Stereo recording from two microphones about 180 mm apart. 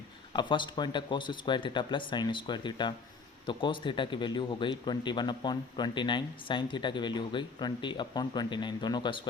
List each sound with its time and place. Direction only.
0.3 s speech: 25° left (ahead or behind)